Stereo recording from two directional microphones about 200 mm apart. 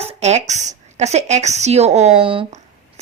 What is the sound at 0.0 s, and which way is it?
A woman's voice, 30° right (ahead or behind).